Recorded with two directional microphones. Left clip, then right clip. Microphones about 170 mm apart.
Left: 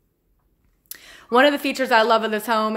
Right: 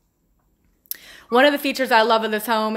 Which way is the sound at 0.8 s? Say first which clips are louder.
Right 1 dB; centre (ahead or behind).